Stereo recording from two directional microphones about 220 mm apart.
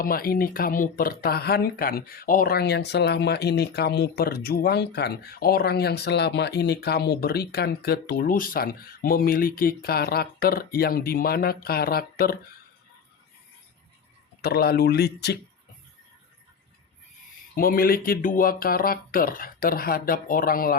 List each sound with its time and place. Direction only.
0.0 s speech: 40° left (ahead or behind)
14.4 s speech: 45° left (ahead or behind)
17.5 s speech: 40° left (ahead or behind)